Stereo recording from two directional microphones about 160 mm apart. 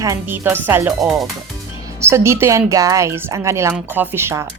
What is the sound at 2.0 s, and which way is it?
Speech, 15° right (ahead or behind).